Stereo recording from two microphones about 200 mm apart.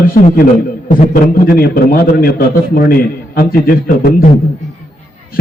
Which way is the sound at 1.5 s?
45° left (ahead or behind).